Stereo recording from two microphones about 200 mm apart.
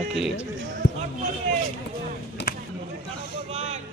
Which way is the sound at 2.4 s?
60° left (ahead or behind).